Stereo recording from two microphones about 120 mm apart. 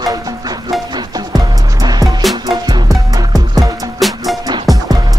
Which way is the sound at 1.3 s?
30° right (ahead or behind).